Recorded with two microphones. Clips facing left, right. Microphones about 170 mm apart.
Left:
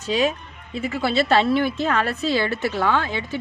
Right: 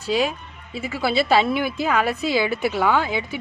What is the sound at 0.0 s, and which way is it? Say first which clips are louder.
A woman's voice: left 1 dB; 5° right (ahead or behind).